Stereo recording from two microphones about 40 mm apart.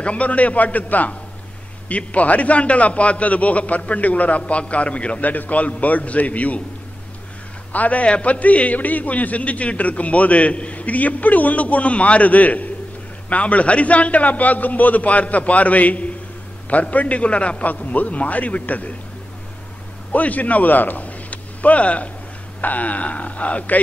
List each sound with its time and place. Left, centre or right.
0.0 s a man's voice: left
5.2 s a man's voice: left
7.7 s a man's voice: left
20.1 s a man's voice: left